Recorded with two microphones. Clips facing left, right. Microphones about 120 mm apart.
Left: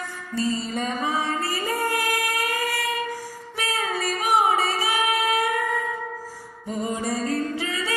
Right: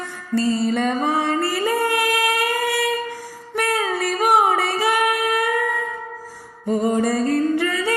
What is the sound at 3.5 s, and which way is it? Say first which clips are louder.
Music: right 6 dB; 60° right (ahead or behind).